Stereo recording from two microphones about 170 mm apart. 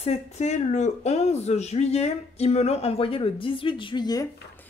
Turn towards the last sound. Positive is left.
turn(degrees=25)  # may be behind; listen again after turning